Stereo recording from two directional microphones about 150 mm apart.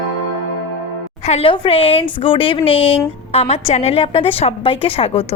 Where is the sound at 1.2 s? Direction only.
45° left (ahead or behind).